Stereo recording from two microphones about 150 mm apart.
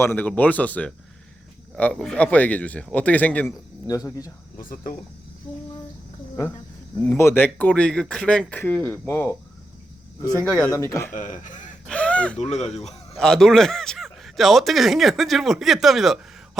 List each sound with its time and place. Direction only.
0.0 s speech: 15° left (ahead or behind)
3.8 s speech: 25° left (ahead or behind)
4.5 s speech: 65° left (ahead or behind)
5.5 s a sound: 10° left (ahead or behind)
7.0 s speech: 15° left (ahead or behind)
10.4 s speech: 5° left (ahead or behind)
10.7 s speech: 20° left (ahead or behind)
11.1 s speech: 60° left (ahead or behind)
11.9 s crow: 5° left (ahead or behind)
12.4 s speech: 45° left (ahead or behind)
13.1 s speech: 5° left (ahead or behind)